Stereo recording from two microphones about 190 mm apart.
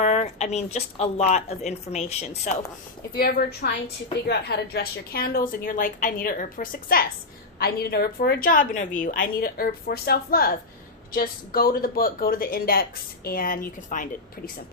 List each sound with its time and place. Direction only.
0.0 s a woman's voice: 35° left (ahead or behind)
3.2 s a woman's voice: 50° left (ahead or behind)